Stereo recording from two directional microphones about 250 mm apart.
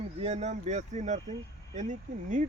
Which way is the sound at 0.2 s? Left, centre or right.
Right.